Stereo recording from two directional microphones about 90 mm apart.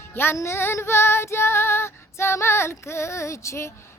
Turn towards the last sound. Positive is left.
turn(degrees=30)  # may be behind; listen again after turning